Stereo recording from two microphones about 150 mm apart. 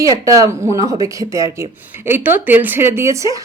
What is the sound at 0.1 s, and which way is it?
A woman's voice, 25° right (ahead or behind).